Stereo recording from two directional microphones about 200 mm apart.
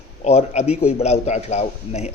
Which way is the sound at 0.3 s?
30° left (ahead or behind).